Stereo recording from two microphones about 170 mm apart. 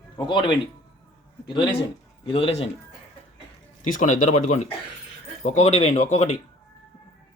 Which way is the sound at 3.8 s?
50° left (ahead or behind).